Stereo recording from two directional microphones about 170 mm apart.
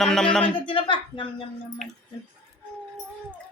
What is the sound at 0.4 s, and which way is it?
Speech, 30° left (ahead or behind).